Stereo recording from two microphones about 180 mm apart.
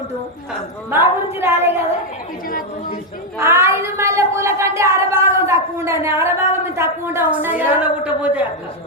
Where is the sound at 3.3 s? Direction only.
15° right (ahead or behind).